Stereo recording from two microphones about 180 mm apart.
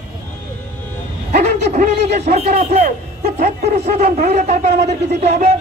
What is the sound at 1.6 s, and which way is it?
A man's voice, 40° right (ahead or behind).